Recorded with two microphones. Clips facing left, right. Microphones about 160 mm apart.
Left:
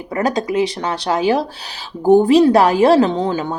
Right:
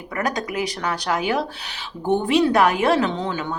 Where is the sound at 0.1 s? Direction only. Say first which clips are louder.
Left 7 dB; 30° left (ahead or behind).